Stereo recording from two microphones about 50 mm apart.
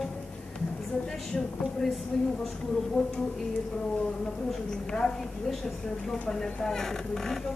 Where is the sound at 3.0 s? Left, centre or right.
Centre.